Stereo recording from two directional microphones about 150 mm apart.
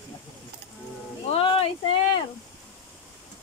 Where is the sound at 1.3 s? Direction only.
40° left (ahead or behind).